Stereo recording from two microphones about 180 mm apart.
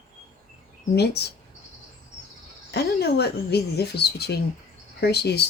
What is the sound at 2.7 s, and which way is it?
Speech, 65° left (ahead or behind).